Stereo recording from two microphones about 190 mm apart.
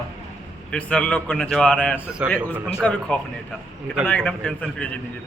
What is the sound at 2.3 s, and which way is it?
A man's voice, 10° left (ahead or behind).